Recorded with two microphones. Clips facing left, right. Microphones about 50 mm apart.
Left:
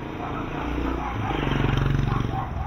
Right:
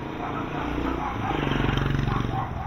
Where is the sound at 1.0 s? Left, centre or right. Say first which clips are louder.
Even; centre.